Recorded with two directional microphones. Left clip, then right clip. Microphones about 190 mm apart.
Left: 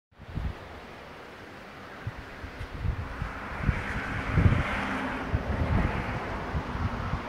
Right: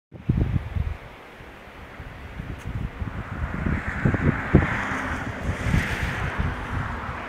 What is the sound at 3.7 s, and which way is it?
Vehicle, 45° left (ahead or behind).